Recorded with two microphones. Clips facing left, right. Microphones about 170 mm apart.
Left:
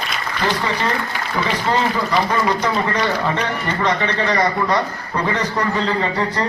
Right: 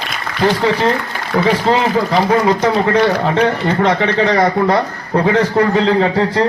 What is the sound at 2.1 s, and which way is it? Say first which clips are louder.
Speech: right 5 dB; 50° right (ahead or behind).